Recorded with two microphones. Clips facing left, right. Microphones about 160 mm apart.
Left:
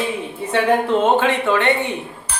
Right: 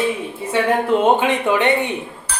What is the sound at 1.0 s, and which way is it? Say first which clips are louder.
Speech: even; 15° right (ahead or behind).